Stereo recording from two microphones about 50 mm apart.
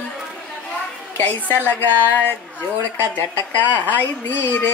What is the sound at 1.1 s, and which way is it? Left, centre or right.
A woman's voice, left.